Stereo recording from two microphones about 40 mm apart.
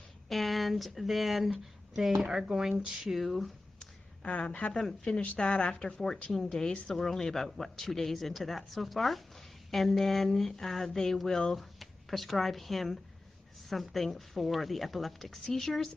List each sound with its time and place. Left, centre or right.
0.3 s a woman's voice: centre
3.0 s a woman's voice: centre
3.8 s a sound: left
5.1 s a woman's voice: left
5.9 s a woman's voice: centre
7.0 s a woman's voice: centre
11.5 s a woman's voice: centre